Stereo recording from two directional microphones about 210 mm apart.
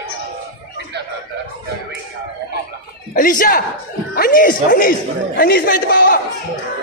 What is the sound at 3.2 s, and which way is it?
A man's voice, 40° left (ahead or behind).